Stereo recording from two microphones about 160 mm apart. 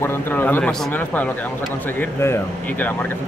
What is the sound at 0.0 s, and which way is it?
Speech, 15° left (ahead or behind).